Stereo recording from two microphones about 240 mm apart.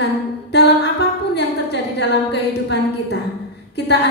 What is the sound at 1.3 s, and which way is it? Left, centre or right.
Speech, left.